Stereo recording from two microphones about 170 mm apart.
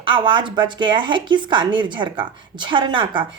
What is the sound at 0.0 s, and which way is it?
Speech, 30° right (ahead or behind).